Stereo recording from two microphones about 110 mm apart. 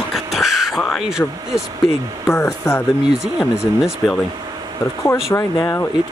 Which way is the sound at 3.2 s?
Centre (ahead or behind).